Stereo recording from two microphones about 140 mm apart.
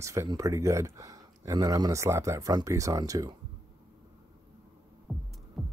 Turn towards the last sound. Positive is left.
turn(degrees=0)  # may be behind; listen again after turning